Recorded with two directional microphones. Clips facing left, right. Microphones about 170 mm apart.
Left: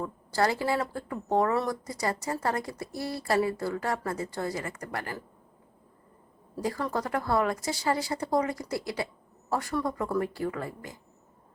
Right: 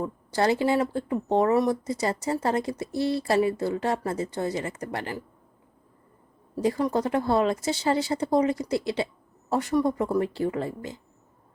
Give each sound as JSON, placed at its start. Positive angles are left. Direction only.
{"t": 0.0, "sound": "speech", "side_deg": -20}
{"t": 6.6, "sound": "speech", "side_deg": -20}